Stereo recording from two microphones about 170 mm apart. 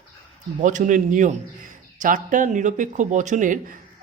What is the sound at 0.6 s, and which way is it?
Speech, 50° right (ahead or behind).